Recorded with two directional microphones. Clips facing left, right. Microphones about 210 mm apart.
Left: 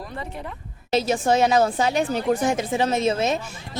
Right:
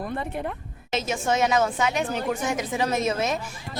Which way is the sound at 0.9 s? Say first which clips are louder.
Left 5 dB; 35° left (ahead or behind).